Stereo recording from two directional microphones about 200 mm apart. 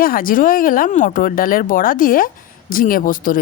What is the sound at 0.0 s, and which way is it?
Speech, 45° left (ahead or behind).